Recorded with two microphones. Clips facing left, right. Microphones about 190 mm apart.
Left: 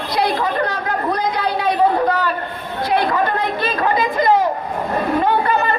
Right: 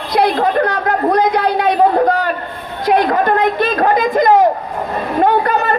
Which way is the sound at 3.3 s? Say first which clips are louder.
Right 6 dB; 55° right (ahead or behind).